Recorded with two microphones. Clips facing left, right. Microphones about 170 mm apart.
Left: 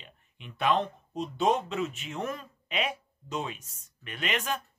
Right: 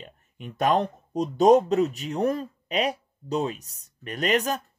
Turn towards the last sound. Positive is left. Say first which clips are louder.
# right 8 dB
turn(degrees=-40)  # may be behind; listen again after turning